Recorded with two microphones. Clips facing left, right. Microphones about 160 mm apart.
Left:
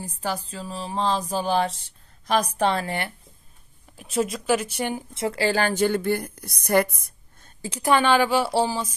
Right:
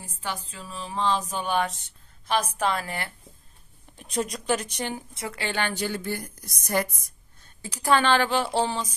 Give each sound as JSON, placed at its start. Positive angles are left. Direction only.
{"t": 0.0, "sound": "music", "side_deg": 35}
{"t": 3.9, "sound": "speech", "side_deg": 5}
{"t": 5.1, "sound": "a woman's voice", "side_deg": 30}
{"t": 7.6, "sound": "a woman's voice", "side_deg": 25}
{"t": 7.9, "sound": "a woman's voice", "side_deg": 10}